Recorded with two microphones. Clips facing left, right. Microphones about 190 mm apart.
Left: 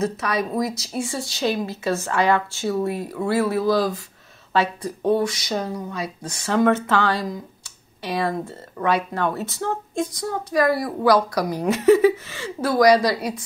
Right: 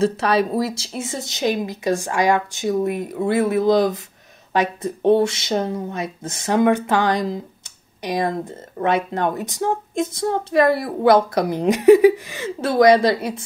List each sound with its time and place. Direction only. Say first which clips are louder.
0.0 s a woman's voice: right 5 dB; 30° right (ahead or behind)